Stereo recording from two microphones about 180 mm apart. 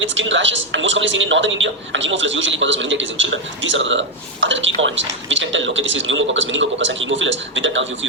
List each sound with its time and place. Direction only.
0.0 s a man's voice: 90° right